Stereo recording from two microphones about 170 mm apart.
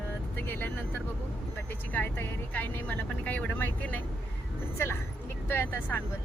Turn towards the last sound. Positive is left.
turn(degrees=10)  # may be behind; listen again after turning